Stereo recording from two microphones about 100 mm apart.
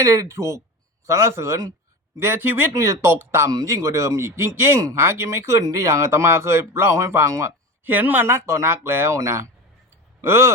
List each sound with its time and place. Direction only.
0.0 s speech: 30° right (ahead or behind)
7.9 s speech: 20° right (ahead or behind)